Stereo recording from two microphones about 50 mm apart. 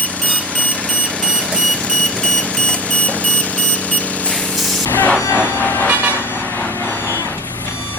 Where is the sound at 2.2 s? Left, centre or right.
Left.